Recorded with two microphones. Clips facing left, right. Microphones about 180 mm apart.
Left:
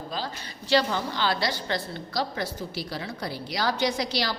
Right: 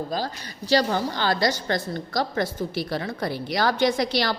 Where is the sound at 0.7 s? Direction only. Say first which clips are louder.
Right 2 dB; 40° right (ahead or behind).